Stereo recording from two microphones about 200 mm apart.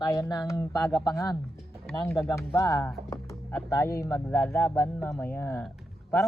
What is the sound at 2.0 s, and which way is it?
Speech, 20° left (ahead or behind).